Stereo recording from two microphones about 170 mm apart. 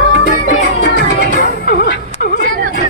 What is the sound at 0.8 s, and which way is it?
Music, 65° left (ahead or behind).